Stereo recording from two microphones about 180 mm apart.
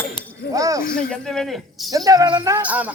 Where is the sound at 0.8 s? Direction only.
55° left (ahead or behind).